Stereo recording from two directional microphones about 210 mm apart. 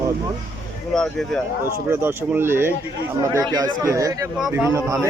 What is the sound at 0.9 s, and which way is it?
Speech, 5° left (ahead or behind).